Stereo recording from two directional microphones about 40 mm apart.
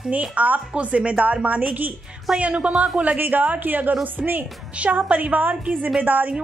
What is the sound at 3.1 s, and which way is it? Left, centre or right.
Speech, right.